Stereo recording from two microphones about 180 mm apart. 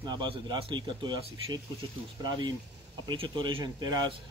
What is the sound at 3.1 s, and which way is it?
Speech, 25° right (ahead or behind).